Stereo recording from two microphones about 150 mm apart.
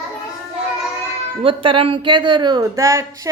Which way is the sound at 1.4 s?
35° right (ahead or behind).